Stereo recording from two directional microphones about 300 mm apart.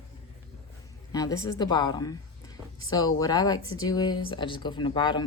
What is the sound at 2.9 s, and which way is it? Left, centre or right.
Speech, centre.